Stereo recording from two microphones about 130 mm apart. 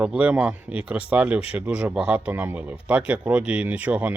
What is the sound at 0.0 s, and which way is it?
Speech, 10° right (ahead or behind).